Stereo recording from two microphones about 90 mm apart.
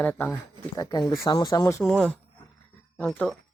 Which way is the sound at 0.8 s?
50° left (ahead or behind).